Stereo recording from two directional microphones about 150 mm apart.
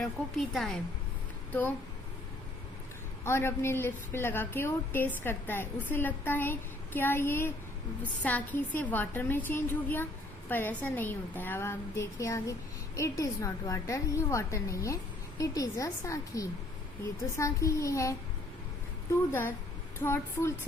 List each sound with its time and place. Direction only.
0.0 s a woman's voice: centre (ahead or behind)
3.2 s a woman's voice: 15° left (ahead or behind)
19.3 s a woman's voice: 15° left (ahead or behind)